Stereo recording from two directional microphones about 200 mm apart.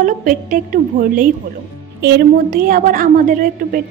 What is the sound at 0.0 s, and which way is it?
A woman's voice, 40° right (ahead or behind).